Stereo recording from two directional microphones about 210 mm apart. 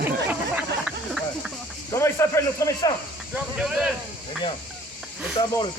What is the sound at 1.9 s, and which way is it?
Speech, 10° left (ahead or behind).